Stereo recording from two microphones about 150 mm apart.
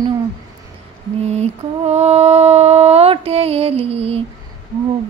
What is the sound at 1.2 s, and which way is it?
Mantra, 45° right (ahead or behind).